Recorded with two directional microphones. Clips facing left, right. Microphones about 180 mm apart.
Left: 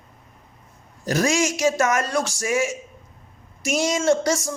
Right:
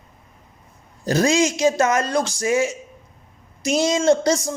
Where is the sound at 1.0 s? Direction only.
30° right (ahead or behind).